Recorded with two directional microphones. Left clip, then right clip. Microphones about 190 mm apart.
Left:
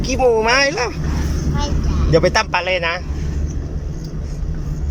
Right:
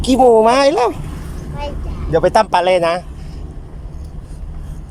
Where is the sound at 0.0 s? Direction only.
25° right (ahead or behind).